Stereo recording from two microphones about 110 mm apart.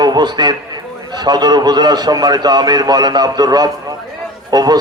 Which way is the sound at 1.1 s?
40° right (ahead or behind).